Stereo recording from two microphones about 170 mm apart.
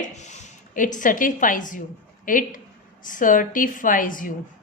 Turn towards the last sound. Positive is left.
turn(degrees=55)  # may be behind; listen again after turning